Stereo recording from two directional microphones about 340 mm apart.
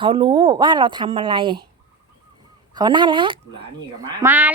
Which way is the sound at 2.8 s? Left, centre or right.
Centre.